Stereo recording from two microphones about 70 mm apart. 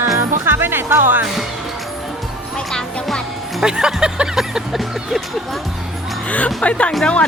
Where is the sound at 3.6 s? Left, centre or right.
Centre.